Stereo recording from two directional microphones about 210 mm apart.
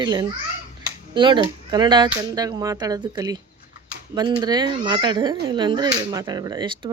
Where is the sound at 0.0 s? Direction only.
20° right (ahead or behind).